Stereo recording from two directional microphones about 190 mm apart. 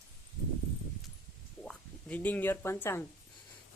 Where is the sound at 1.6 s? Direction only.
5° left (ahead or behind).